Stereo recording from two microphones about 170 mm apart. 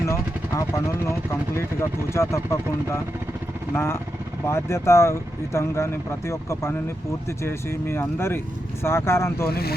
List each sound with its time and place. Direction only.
0.0 s vehicle: 15° left (ahead or behind)
1.0 s speech: 15° left (ahead or behind)
9.5 s speech: 65° left (ahead or behind)